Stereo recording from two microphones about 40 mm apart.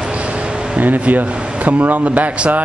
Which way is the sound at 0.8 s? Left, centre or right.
Right.